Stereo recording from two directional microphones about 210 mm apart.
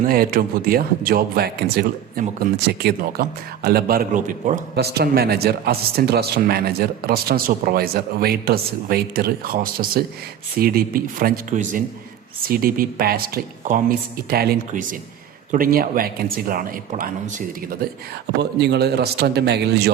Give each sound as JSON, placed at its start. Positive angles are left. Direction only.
{"t": 0.0, "sound": "speech", "side_deg": -45}
{"t": 18.6, "sound": "speech", "side_deg": -50}